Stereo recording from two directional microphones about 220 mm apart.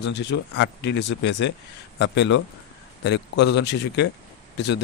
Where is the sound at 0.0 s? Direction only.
50° left (ahead or behind).